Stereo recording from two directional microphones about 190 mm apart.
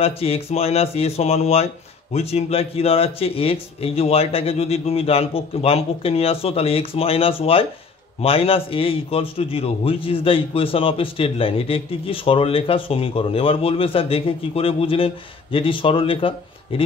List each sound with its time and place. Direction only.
0.0 s a man's voice: 30° left (ahead or behind)